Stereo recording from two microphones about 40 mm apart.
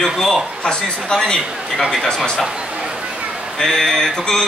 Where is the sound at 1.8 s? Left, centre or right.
Centre.